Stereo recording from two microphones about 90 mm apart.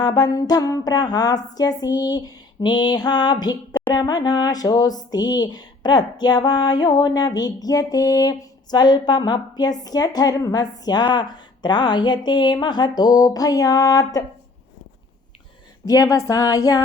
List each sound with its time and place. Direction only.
0.0 s speech: 50° left (ahead or behind)
15.9 s speech: 40° left (ahead or behind)